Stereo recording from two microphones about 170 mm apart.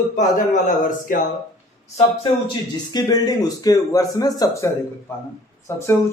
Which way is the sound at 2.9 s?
25° left (ahead or behind).